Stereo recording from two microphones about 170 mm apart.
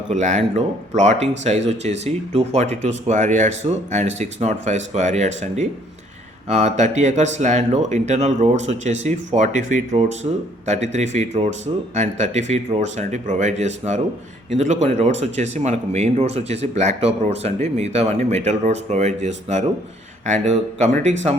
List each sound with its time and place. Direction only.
0.1 s speech: 45° right (ahead or behind)
6.5 s speech: 40° right (ahead or behind)
10.3 s speech: 30° right (ahead or behind)
10.7 s speech: 45° right (ahead or behind)